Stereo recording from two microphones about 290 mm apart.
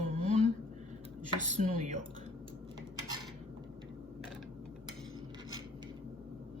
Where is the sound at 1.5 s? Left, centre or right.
Right.